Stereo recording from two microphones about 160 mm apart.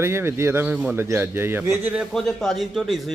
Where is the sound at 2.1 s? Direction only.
5° left (ahead or behind).